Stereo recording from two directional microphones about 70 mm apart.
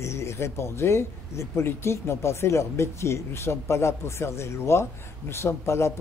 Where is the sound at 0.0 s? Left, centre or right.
Left.